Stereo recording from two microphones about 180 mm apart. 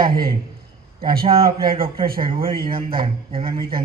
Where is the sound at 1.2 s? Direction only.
30° right (ahead or behind).